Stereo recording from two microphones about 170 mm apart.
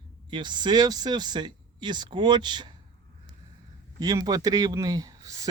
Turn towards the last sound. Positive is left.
turn(degrees=-20)  # may be behind; listen again after turning